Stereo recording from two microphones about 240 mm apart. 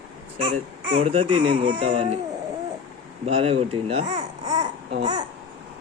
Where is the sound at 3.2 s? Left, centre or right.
Right.